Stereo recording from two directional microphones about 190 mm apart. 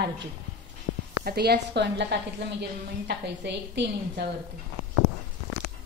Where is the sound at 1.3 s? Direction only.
55° right (ahead or behind).